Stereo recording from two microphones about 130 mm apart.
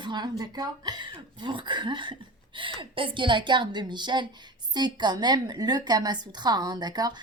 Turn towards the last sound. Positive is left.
turn(degrees=-30)  # may be behind; listen again after turning